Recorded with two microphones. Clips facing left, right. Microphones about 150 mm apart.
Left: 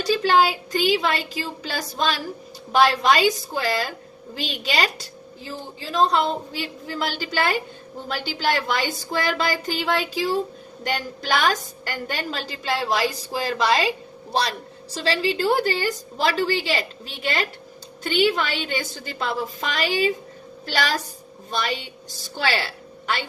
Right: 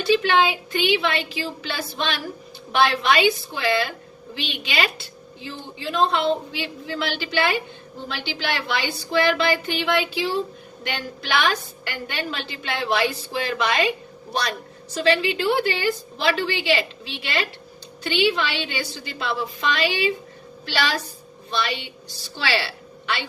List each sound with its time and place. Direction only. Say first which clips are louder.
0.0 s a woman's voice: even; 40° left (ahead or behind)